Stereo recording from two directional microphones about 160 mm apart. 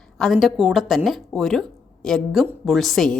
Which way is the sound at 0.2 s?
Centre (ahead or behind).